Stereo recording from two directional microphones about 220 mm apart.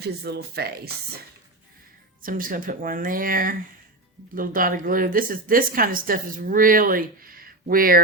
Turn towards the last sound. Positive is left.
turn(degrees=-40)  # may be behind; listen again after turning